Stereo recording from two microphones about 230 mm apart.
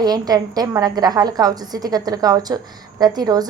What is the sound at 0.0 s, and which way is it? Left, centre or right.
A woman's voice, centre.